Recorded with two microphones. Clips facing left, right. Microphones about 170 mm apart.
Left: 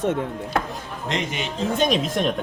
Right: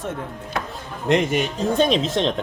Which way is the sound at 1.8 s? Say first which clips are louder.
Right 2 dB; 25° right (ahead or behind).